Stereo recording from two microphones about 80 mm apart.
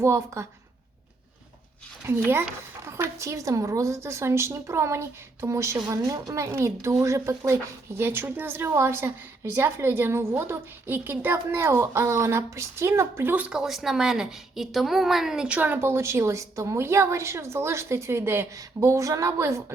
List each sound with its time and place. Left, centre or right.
0.0 s a woman's voice: right
2.0 s a woman's voice: right
13.3 s speech: centre
13.6 s a woman's voice: centre
15.4 s a woman's voice: right